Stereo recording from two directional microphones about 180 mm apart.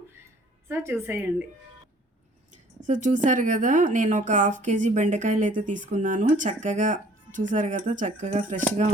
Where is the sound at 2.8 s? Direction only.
45° right (ahead or behind).